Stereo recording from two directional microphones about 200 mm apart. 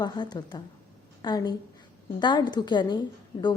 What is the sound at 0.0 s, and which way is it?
A woman's voice, 20° left (ahead or behind).